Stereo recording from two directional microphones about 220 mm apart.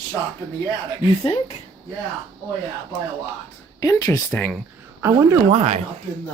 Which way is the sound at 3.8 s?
15° left (ahead or behind).